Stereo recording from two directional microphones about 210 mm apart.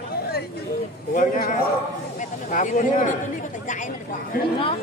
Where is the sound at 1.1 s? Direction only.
35° left (ahead or behind).